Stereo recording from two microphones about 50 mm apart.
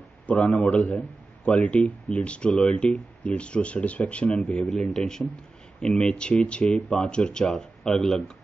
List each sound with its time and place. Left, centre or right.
0.3 s a man's voice: left
4.6 s speech: centre